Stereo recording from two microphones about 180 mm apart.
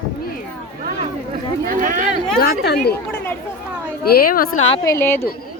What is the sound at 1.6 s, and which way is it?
Speech, 50° right (ahead or behind).